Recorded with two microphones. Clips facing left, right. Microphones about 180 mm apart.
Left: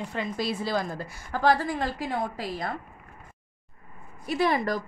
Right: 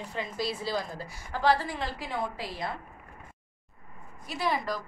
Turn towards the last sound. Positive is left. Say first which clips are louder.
# left 5 dB
turn(degrees=55)  # may be behind; listen again after turning